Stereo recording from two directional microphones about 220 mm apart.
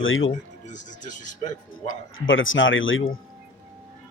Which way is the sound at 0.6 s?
35° left (ahead or behind).